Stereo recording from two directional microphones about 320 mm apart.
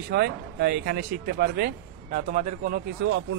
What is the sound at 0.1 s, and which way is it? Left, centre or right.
Speech, right.